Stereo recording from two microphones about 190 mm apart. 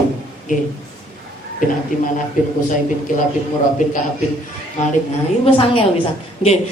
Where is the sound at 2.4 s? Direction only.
45° left (ahead or behind).